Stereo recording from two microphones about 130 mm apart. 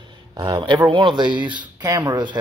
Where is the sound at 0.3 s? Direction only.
35° right (ahead or behind).